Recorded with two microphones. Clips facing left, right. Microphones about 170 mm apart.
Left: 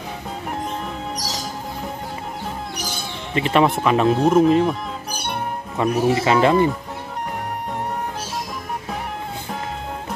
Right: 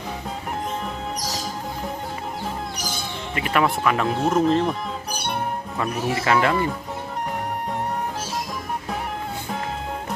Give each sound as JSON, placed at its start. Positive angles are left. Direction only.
{"t": 3.3, "sound": "speech", "side_deg": 25}
{"t": 4.2, "sound": "speech", "side_deg": 5}
{"t": 5.8, "sound": "speech", "side_deg": 20}